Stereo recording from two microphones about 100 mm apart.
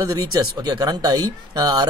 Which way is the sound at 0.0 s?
40° right (ahead or behind).